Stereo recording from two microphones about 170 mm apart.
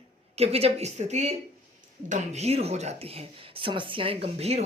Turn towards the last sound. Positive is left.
turn(degrees=-35)  # may be behind; listen again after turning